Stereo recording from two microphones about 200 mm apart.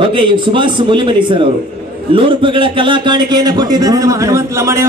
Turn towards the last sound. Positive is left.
turn(degrees=-15)  # may be behind; listen again after turning